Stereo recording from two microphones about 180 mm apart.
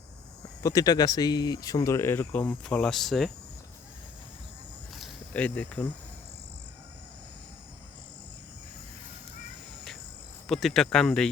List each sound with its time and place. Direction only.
0.6 s speech: 20° left (ahead or behind); by 3.3 s centre (ahead or behind)
4.9 s cricket: 5° left (ahead or behind)
10.4 s speech: centre (ahead or behind)